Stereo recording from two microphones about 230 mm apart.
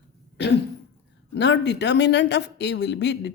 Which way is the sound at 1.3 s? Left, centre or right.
Left.